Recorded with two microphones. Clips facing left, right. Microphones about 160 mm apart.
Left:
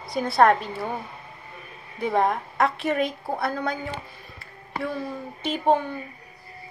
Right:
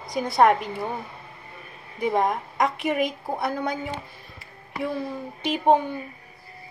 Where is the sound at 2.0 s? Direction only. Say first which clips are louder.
Even; 15° right (ahead or behind).